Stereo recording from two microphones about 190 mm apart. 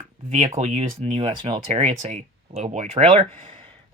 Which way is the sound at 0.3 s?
40° right (ahead or behind).